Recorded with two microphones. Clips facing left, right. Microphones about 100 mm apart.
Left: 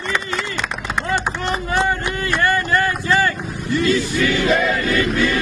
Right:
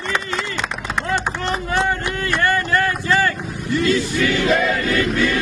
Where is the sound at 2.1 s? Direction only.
10° left (ahead or behind).